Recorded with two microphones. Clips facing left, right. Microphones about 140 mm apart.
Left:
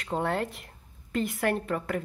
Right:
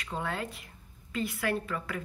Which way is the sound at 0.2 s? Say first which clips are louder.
Left 5 dB; 55° left (ahead or behind).